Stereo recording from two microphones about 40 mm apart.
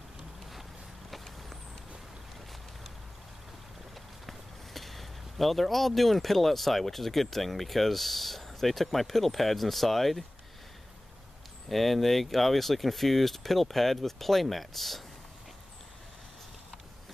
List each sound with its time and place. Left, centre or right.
1.1 s a sound: centre
3.9 s speech: centre
11.7 s speech: centre